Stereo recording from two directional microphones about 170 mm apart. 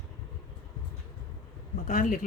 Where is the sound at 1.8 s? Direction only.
50° left (ahead or behind).